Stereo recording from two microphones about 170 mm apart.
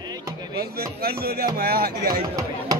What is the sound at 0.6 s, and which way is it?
Speech, 65° right (ahead or behind).